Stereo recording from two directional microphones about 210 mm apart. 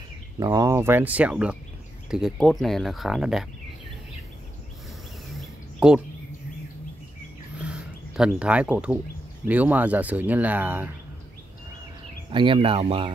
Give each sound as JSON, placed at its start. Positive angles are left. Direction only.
{"t": 0.4, "sound": "speech", "side_deg": -20}
{"t": 5.8, "sound": "speech", "side_deg": -5}
{"t": 7.6, "sound": "a sound", "side_deg": -5}
{"t": 9.5, "sound": "speech", "side_deg": -10}
{"t": 12.3, "sound": "speech", "side_deg": -25}